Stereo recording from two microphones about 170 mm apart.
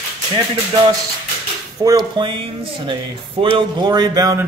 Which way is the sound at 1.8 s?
25° right (ahead or behind).